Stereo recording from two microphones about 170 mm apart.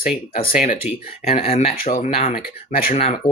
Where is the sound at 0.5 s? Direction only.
35° left (ahead or behind).